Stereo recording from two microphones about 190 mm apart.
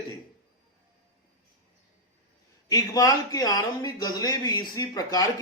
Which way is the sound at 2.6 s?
20° left (ahead or behind).